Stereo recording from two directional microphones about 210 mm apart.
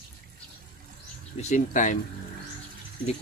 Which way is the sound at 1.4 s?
35° left (ahead or behind).